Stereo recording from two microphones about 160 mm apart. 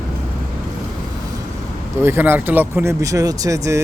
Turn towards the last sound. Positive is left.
turn(degrees=-20)  # may be behind; listen again after turning